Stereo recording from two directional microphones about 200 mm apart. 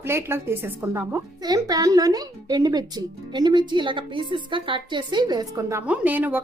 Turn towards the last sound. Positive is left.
turn(degrees=-10)  # may be behind; listen again after turning